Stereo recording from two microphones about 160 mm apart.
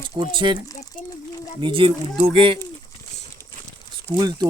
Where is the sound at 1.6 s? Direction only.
35° right (ahead or behind).